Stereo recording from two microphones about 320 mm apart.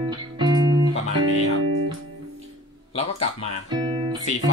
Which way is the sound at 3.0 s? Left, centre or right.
Left.